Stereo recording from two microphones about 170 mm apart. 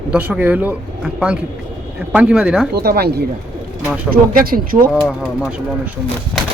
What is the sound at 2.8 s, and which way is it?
Speech, 65° right (ahead or behind).